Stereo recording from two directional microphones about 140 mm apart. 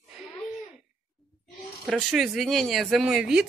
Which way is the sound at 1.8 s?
Centre (ahead or behind).